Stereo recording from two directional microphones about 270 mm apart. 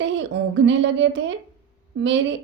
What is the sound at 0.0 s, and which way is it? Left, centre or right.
A woman's voice, right.